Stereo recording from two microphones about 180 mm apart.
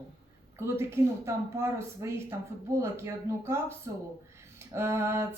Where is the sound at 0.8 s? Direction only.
15° right (ahead or behind).